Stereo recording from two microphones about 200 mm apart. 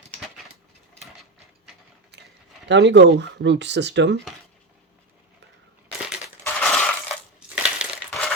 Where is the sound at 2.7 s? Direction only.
60° right (ahead or behind).